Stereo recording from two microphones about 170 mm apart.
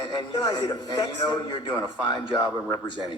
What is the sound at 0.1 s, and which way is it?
A man's voice, 30° left (ahead or behind).